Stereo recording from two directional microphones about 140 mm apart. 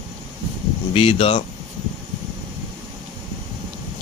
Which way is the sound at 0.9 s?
40° left (ahead or behind).